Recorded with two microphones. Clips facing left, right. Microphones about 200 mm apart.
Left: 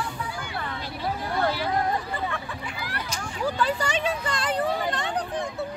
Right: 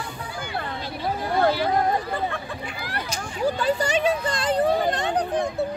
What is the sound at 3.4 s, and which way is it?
A child's voice, 35° right (ahead or behind).